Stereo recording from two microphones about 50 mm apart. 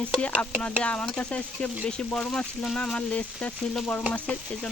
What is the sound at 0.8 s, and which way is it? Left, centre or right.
Speech, centre.